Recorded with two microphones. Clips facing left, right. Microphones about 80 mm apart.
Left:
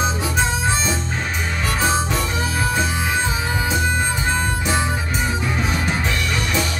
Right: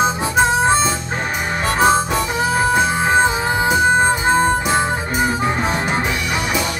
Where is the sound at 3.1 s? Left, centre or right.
Right.